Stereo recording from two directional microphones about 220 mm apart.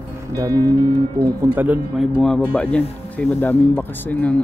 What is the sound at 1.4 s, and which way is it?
Speech, 10° right (ahead or behind).